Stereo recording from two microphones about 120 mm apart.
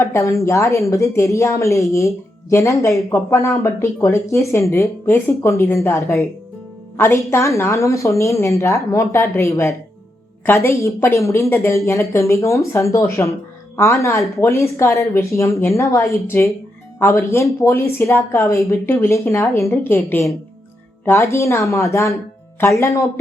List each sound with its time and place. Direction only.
0.0 s speech: 25° left (ahead or behind)